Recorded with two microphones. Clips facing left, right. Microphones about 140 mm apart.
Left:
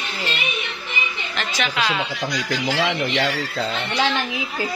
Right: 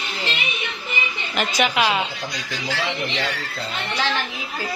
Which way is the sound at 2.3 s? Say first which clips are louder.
Left 7 dB; 80° left.